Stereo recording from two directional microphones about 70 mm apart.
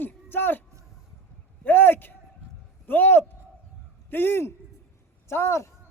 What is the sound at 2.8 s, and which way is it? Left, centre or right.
A man's voice, left.